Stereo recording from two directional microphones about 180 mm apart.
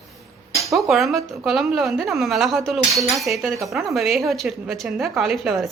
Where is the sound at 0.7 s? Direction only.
Centre (ahead or behind).